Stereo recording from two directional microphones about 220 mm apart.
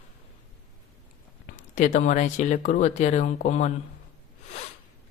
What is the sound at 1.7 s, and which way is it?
Speech, 35° left (ahead or behind).